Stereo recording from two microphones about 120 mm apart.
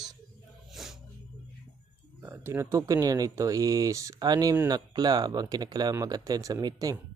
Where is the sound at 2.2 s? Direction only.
20° right (ahead or behind).